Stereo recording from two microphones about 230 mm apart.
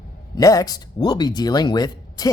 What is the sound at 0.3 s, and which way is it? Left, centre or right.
Speech, centre.